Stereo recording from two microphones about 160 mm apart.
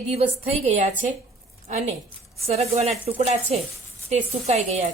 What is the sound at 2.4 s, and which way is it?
A woman's voice, 40° right (ahead or behind).